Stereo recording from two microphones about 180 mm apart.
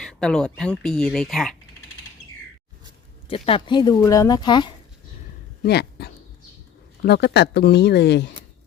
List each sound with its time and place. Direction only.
0.0 s speech: 5° left (ahead or behind)
3.2 s speech: 35° left (ahead or behind)
5.6 s speech: 65° left (ahead or behind)